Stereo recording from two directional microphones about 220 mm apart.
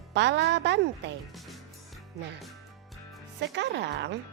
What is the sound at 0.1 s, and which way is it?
Speech, 50° right (ahead or behind).